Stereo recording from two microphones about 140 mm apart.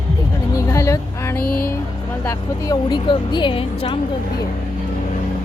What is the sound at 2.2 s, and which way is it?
A woman's voice, 30° left (ahead or behind).